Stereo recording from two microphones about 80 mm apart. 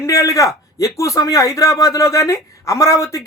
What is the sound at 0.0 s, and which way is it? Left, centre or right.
A man's voice, left.